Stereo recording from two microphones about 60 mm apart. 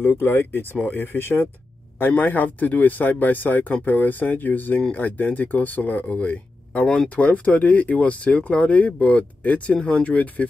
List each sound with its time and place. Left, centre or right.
0.0 s speech: left